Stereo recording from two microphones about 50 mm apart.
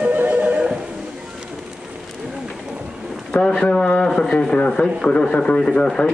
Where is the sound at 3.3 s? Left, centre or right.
Centre.